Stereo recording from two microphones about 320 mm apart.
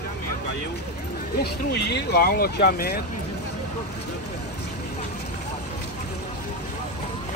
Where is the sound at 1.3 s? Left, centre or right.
Left.